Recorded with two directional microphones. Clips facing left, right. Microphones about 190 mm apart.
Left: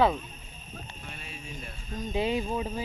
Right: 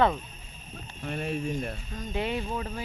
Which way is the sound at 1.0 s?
55° right (ahead or behind).